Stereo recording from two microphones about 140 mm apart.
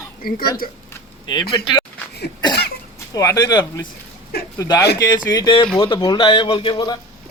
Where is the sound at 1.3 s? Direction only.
30° left (ahead or behind).